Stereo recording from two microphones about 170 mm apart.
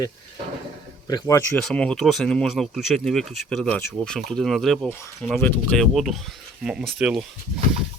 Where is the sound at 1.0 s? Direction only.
20° left (ahead or behind).